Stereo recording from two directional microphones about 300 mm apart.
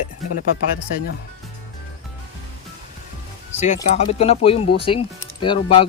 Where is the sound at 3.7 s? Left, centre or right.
Centre.